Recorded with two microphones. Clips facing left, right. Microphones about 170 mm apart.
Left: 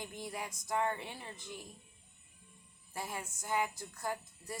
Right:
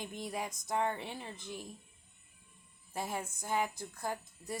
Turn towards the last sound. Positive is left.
turn(degrees=-20)  # may be behind; listen again after turning